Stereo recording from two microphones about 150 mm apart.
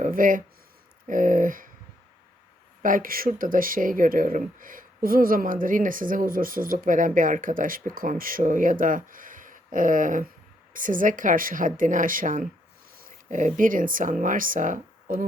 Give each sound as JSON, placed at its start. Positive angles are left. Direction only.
{"t": 0.0, "sound": "speech", "side_deg": -65}
{"t": 2.8, "sound": "speech", "side_deg": -65}